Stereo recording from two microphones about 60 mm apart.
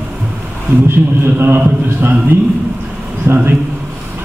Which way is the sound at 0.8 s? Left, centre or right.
Right.